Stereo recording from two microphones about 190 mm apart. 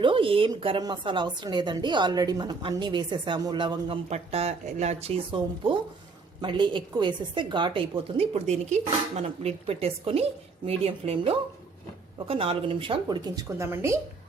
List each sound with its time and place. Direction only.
0.0 s a woman's voice: 25° right (ahead or behind)